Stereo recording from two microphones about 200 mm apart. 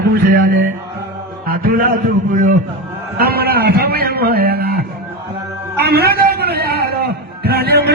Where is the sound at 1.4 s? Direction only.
45° right (ahead or behind).